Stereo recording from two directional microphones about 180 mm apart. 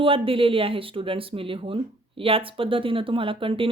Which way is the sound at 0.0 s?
30° right (ahead or behind).